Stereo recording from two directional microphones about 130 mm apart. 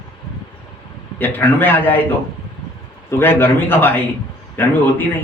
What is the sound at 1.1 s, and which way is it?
Speech, 15° left (ahead or behind).